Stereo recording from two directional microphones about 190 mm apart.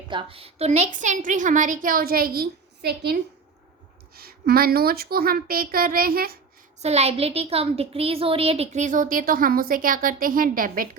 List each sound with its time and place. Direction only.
0.1 s a woman's voice: 25° right (ahead or behind); by 6.4 s 50° right (ahead or behind)
6.7 s a child's voice: 35° right (ahead or behind)